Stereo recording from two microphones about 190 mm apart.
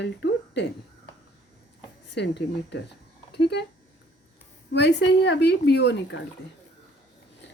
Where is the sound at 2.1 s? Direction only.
65° left (ahead or behind).